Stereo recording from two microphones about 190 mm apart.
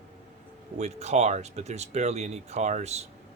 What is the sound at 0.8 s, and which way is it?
Speech, 35° right (ahead or behind).